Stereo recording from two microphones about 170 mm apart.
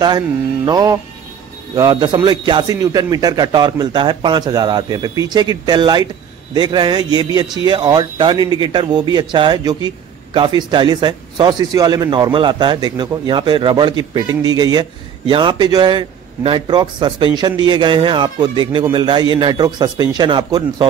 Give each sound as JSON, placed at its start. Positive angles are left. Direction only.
{"t": 0.7, "sound": "speech", "side_deg": -20}